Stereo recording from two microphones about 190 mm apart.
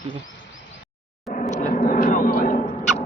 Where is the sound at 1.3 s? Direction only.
40° left (ahead or behind).